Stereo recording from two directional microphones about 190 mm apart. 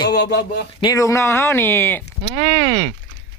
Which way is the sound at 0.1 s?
60° left (ahead or behind).